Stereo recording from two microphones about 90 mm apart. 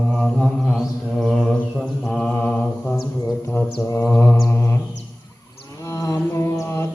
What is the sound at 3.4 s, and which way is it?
Mantra, 35° left (ahead or behind).